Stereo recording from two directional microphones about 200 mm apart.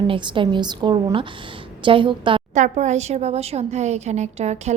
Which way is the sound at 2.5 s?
35° right (ahead or behind).